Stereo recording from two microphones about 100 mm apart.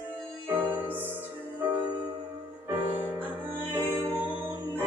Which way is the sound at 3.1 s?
15° right (ahead or behind).